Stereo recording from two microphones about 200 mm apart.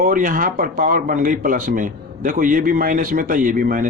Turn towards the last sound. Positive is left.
turn(degrees=-45)  # may be behind; listen again after turning